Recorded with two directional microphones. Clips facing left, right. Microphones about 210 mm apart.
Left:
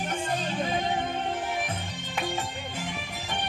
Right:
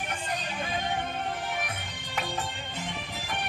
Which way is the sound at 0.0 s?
30° left (ahead or behind).